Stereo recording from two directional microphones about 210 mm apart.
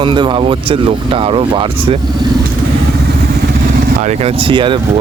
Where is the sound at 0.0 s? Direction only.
20° right (ahead or behind).